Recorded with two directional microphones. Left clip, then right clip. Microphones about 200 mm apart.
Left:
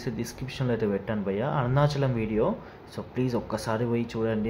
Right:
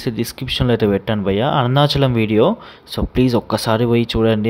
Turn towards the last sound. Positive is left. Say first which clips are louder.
# right 12 dB
turn(degrees=-45)  # may be behind; listen again after turning